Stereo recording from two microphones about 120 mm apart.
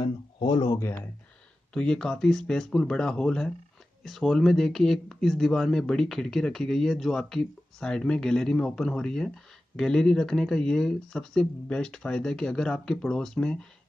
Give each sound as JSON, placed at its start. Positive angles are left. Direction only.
{"t": 0.0, "sound": "speech", "side_deg": 45}
{"t": 1.7, "sound": "speech", "side_deg": 10}